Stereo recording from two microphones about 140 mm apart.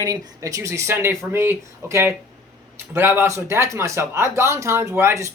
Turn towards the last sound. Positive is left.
turn(degrees=-20)  # may be behind; listen again after turning